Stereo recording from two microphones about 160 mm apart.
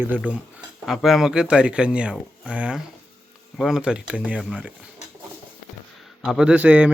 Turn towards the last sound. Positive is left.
turn(degrees=-10)  # may be behind; listen again after turning